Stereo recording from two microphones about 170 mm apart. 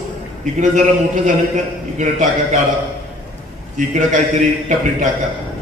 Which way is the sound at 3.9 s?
45° right (ahead or behind).